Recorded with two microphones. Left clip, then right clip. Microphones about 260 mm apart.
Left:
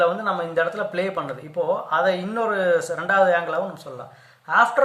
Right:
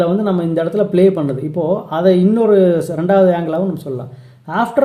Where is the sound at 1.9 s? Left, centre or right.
Centre.